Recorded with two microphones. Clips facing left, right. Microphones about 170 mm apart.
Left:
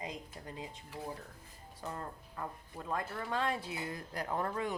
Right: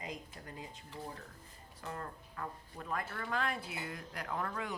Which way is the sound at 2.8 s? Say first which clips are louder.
Left 2 dB; 25° left (ahead or behind).